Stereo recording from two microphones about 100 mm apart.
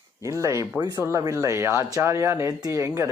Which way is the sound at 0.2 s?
30° right (ahead or behind).